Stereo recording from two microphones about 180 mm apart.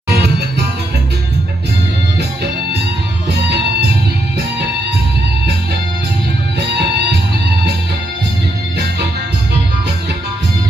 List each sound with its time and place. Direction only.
0.1 s music: 60° right (ahead or behind)